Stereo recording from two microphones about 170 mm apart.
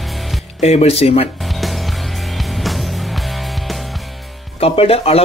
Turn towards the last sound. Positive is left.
turn(degrees=35)  # may be behind; listen again after turning